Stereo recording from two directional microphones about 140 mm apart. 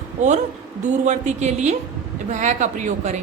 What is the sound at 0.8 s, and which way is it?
A woman's voice, 60° right (ahead or behind).